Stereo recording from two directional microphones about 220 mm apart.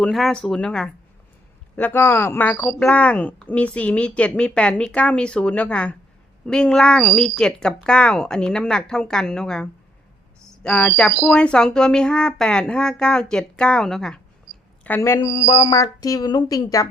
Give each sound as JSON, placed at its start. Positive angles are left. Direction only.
{"t": 0.0, "sound": "a woman's voice", "side_deg": 0}